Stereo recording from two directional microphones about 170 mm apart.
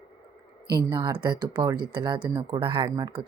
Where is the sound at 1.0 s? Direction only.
25° right (ahead or behind).